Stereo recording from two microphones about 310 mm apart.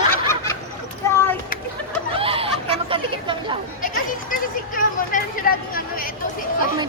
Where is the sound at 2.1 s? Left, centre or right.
Centre.